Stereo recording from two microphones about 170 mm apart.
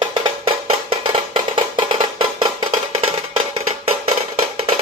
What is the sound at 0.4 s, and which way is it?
Music, 30° right (ahead or behind).